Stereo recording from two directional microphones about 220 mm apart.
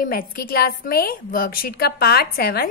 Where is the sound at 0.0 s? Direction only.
40° left (ahead or behind).